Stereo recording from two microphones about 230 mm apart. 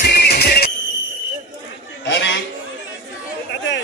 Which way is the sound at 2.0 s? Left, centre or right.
Left.